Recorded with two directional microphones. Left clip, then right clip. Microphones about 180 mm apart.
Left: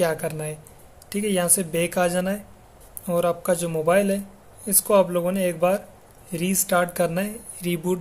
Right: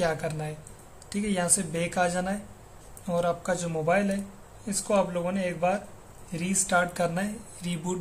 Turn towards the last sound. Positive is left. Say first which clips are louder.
# left 8 dB
turn(degrees=35)  # may be behind; listen again after turning